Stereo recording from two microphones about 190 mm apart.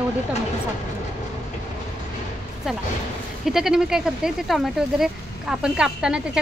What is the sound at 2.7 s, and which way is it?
Speech, 5° right (ahead or behind).